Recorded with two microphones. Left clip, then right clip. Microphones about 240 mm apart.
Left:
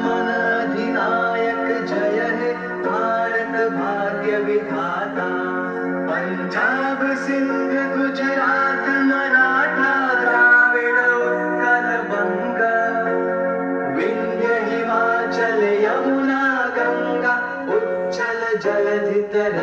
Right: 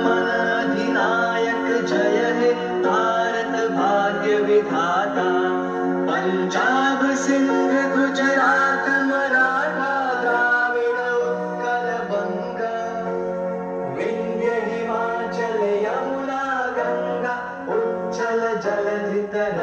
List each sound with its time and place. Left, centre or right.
7.7 s music: centre; by 10.7 s right